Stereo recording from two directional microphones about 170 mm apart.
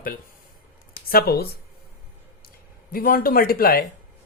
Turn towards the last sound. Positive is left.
turn(degrees=60)  # may be behind; listen again after turning